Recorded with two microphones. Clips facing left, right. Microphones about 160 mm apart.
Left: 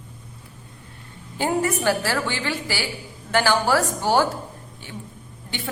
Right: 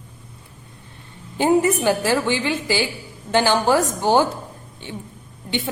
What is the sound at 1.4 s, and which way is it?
A woman's voice, 20° right (ahead or behind).